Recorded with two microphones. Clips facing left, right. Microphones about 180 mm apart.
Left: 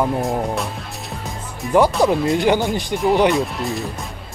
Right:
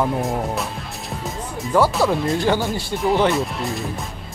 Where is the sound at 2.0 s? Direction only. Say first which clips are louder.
Left 3 dB; 20° left (ahead or behind).